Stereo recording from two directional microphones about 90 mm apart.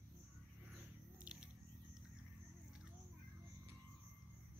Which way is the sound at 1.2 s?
10° right (ahead or behind).